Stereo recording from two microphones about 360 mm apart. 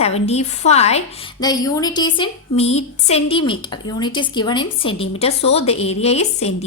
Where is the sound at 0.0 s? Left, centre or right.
Centre.